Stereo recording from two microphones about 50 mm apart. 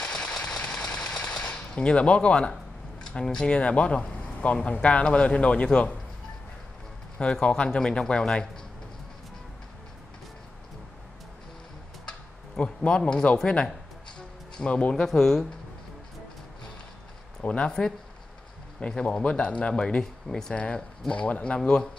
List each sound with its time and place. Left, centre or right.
0.0 s sewing machine: centre
3.0 s speech: centre
7.2 s speech: centre
12.1 s a sound: left
13.4 s speech: centre
15.0 s speech: centre
17.4 s speech: left; by 20.5 s centre
20.5 s speech: left